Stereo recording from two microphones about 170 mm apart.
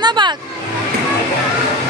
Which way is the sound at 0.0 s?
25° right (ahead or behind).